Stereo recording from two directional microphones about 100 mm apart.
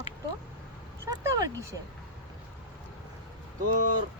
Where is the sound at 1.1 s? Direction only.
35° right (ahead or behind).